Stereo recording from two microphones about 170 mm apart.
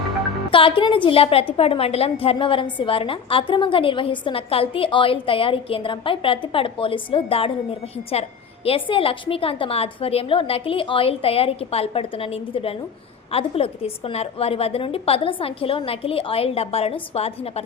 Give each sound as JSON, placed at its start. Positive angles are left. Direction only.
{"t": 0.5, "sound": "a woman's voice", "side_deg": 30}